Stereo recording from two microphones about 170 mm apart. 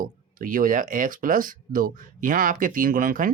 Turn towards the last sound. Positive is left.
turn(degrees=-55)  # may be behind; listen again after turning